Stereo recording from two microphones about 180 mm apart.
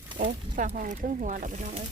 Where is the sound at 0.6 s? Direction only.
45° right (ahead or behind).